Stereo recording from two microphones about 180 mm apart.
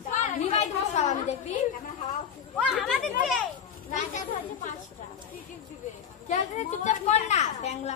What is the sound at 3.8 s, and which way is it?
Speech, 45° left (ahead or behind).